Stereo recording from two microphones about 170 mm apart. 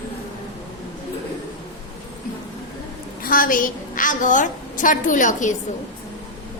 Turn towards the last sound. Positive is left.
turn(degrees=50)  # may be behind; listen again after turning